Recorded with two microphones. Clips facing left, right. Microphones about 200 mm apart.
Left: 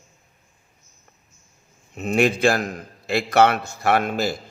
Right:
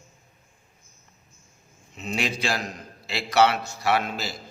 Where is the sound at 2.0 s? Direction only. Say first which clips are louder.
Left 9 dB; 55° left (ahead or behind).